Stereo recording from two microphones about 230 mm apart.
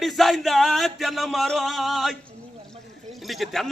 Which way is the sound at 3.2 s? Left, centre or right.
Centre.